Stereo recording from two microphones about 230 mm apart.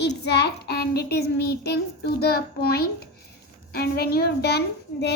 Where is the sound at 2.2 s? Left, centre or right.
Left.